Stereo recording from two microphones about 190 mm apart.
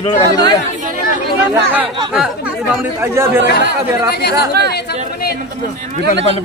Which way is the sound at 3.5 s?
55° left (ahead or behind).